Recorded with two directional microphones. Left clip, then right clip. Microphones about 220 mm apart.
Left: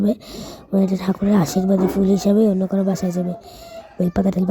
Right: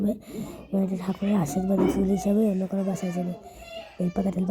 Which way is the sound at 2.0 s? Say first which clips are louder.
Left 8 dB; 50° left (ahead or behind).